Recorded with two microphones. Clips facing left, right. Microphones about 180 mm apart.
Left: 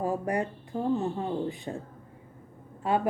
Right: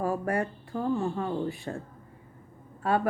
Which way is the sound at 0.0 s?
20° left (ahead or behind).